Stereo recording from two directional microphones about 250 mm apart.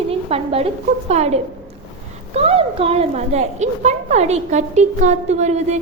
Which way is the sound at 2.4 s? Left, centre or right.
Right.